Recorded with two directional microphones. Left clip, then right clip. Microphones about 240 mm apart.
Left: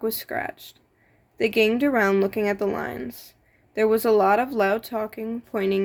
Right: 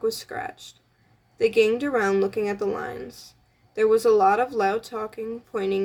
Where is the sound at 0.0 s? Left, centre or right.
Left.